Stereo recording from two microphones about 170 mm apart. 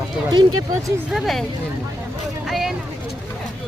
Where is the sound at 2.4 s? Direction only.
Centre (ahead or behind).